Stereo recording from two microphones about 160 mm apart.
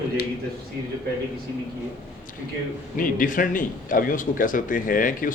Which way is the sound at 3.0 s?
60° left (ahead or behind).